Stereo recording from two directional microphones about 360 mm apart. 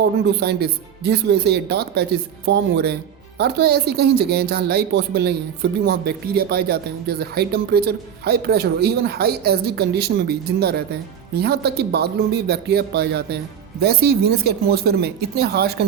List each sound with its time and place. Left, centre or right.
0.0 s speech: right